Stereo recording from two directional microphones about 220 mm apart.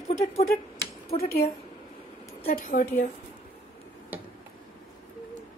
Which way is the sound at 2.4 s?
40° left (ahead or behind).